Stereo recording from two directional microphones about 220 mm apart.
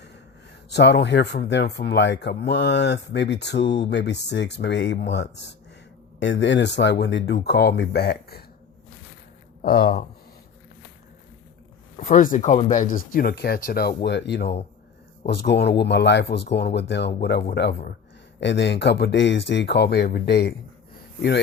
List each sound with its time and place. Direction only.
0.7 s speech: 50° left (ahead or behind)
9.6 s speech: 45° left (ahead or behind)
11.9 s speech: 35° left (ahead or behind)
12.8 s speech: 40° left (ahead or behind)